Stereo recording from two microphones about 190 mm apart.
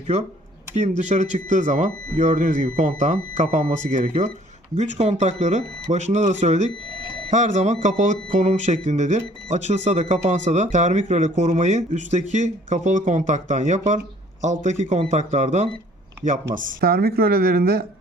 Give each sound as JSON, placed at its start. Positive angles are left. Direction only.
{"t": 0.8, "sound": "speech", "side_deg": -40}
{"t": 16.6, "sound": "a woman's voice", "side_deg": -55}